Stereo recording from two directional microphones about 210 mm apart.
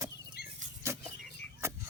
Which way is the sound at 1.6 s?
10° right (ahead or behind).